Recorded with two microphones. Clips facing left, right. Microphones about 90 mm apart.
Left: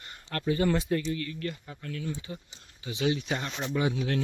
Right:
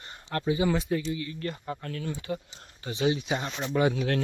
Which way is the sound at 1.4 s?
40° right (ahead or behind).